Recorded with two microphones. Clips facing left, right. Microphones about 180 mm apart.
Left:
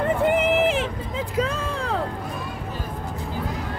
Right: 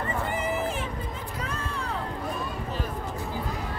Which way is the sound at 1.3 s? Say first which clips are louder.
Left 11 dB; 90° left.